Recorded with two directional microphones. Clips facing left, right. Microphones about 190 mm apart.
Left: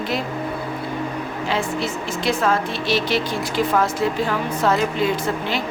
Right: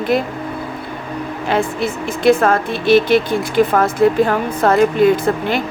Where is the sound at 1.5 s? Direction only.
55° right (ahead or behind).